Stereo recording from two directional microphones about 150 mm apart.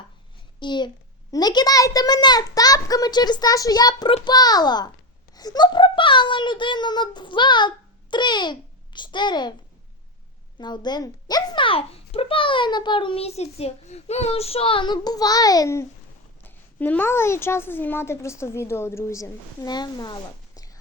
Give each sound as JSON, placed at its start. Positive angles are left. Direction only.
{"t": 0.6, "sound": "a child's voice", "side_deg": 30}
{"t": 10.6, "sound": "a child's voice", "side_deg": 30}